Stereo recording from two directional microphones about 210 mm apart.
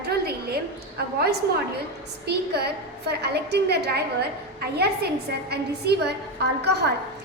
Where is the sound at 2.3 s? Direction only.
50° right (ahead or behind).